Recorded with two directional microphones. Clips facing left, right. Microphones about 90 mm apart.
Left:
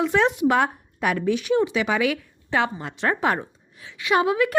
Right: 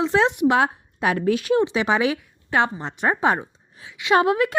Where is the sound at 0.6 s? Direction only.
30° right (ahead or behind).